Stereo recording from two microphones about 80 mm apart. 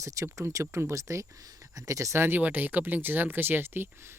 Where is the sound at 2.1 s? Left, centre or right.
Right.